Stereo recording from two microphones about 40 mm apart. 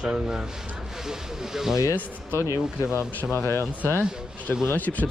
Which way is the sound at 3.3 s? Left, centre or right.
Left.